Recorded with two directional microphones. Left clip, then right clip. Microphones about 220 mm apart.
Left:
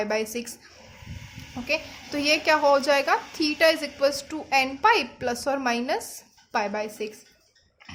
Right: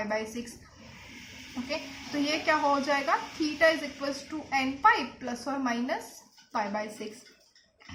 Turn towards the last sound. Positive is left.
turn(degrees=40)  # may be behind; listen again after turning